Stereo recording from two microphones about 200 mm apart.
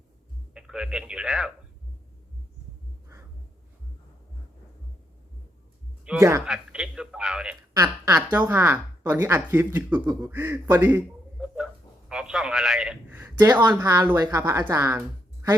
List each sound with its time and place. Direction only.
0.5 s speech: 5° right (ahead or behind)
6.1 s a man's voice: 15° right (ahead or behind)
7.7 s speech: 15° right (ahead or behind)
13.5 s speech: 20° right (ahead or behind)